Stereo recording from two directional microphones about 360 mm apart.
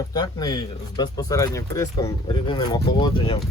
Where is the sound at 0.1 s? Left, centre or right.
Centre.